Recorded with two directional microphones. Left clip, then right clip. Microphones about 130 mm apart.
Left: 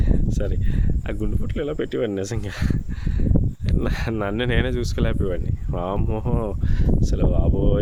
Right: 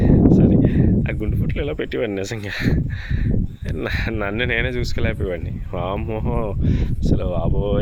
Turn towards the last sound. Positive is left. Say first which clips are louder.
# right 1 dB
turn(degrees=30)  # may be behind; listen again after turning